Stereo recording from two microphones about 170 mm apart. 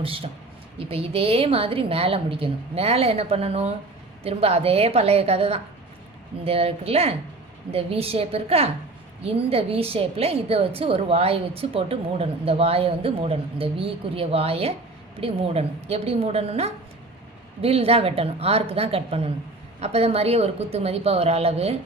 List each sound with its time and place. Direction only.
0.0 s a woman's voice: 30° right (ahead or behind)